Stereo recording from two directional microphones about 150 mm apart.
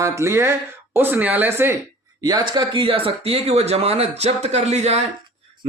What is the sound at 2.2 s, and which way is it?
Speech, 25° right (ahead or behind).